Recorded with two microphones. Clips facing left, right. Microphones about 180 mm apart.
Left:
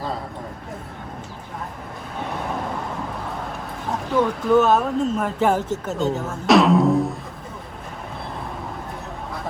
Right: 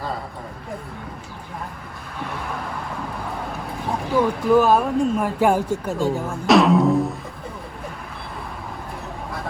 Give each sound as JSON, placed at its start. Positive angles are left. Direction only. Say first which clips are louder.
{"t": 4.1, "sound": "speech", "louder": "right 1 dB", "side_deg": 0}
{"t": 5.9, "sound": "speech", "louder": "even", "side_deg": 20}
{"t": 6.5, "sound": "music", "louder": "even", "side_deg": 0}